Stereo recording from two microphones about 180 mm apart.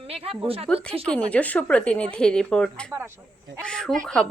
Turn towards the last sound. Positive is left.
turn(degrees=5)  # may be behind; listen again after turning